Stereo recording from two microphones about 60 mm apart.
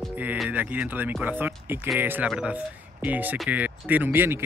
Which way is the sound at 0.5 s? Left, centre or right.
Right.